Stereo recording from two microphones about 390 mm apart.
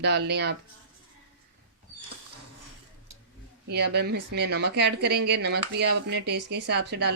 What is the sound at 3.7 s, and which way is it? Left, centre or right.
Speech, right.